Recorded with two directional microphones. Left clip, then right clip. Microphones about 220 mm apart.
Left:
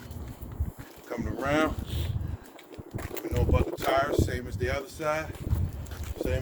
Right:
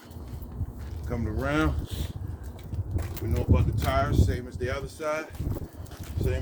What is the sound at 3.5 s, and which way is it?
Speech, 35° left (ahead or behind).